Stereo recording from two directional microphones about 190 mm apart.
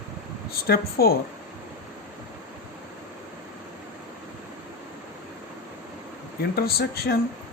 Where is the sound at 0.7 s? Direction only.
55° left (ahead or behind).